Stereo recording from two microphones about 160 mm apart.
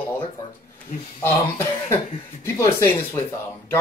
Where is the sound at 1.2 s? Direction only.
15° left (ahead or behind).